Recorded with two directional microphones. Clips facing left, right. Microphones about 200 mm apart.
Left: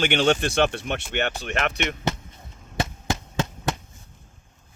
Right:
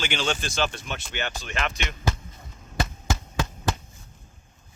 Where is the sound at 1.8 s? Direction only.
20° left (ahead or behind).